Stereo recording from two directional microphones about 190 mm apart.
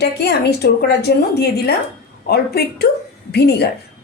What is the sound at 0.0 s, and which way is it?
Speech, 60° left (ahead or behind).